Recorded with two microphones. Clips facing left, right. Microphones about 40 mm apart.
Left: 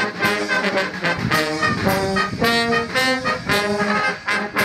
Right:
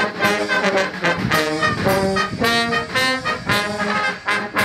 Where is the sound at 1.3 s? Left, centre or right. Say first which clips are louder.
Right 1 dB; centre.